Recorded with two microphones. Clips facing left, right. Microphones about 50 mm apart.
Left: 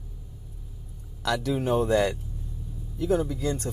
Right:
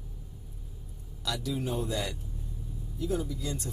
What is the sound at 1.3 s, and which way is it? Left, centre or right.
Speech, left.